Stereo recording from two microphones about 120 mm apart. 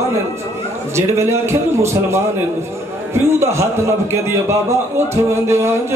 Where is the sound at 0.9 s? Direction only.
20° right (ahead or behind).